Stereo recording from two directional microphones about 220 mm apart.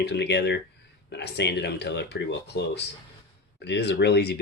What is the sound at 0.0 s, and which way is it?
Speech, 50° left (ahead or behind).